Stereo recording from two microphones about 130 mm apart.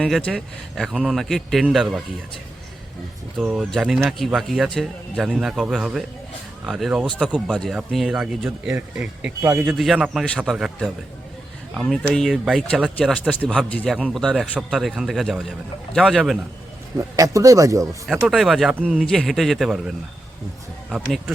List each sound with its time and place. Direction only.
0.0 s speech: 5° left (ahead or behind)
3.4 s a man's voice: 10° right (ahead or behind)
9.7 s speech: centre (ahead or behind)
13.7 s a man's voice: 10° left (ahead or behind)
13.9 s speech: centre (ahead or behind)
17.0 s speech: 25° right (ahead or behind)
18.1 s speech: centre (ahead or behind)
20.9 s speech: centre (ahead or behind)